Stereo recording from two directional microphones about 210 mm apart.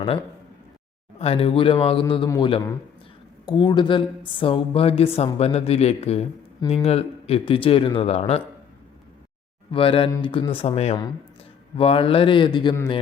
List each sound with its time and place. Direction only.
1.2 s speech: 30° left (ahead or behind)
9.7 s speech: 25° left (ahead or behind)